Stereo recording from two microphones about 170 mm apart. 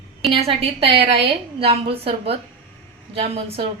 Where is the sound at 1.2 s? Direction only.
35° right (ahead or behind).